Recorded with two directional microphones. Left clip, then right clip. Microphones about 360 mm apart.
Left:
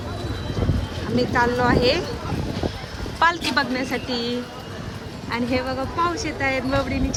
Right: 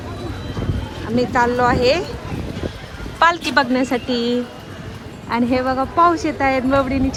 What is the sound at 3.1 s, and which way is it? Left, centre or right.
A woman's voice, centre.